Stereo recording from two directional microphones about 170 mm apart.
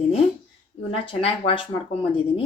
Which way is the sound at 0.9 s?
35° left (ahead or behind).